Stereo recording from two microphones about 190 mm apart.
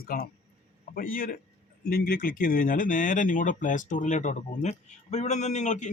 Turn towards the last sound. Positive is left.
turn(degrees=40)  # may be behind; listen again after turning